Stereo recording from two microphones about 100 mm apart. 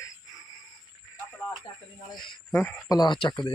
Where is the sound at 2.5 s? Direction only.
20° left (ahead or behind).